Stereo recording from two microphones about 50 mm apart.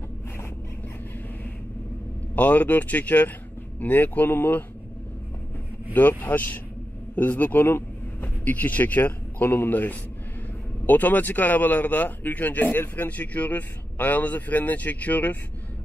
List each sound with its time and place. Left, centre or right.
2.3 s speech: left
5.9 s a man's voice: left
8.5 s speech: left